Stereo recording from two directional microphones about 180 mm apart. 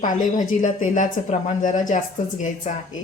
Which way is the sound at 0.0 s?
45° left (ahead or behind).